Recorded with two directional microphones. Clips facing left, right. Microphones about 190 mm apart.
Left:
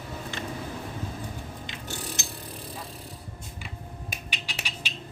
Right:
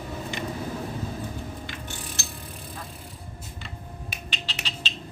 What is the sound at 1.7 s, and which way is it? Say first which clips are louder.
Clock: right 3 dB; 20° left (ahead or behind).